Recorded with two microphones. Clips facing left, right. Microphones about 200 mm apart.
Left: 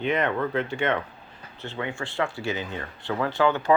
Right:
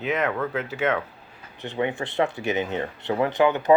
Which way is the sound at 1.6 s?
20° right (ahead or behind).